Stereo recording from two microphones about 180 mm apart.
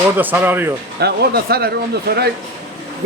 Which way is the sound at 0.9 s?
65° right (ahead or behind).